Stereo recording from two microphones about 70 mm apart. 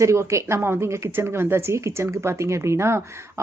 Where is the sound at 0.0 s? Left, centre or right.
Right.